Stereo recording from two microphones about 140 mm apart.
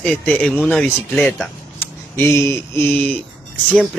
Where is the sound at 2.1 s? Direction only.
20° left (ahead or behind).